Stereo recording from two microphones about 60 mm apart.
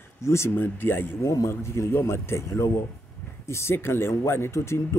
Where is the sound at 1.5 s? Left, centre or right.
Left.